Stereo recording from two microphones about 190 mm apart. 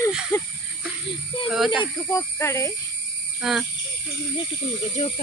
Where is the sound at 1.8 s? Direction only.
15° left (ahead or behind).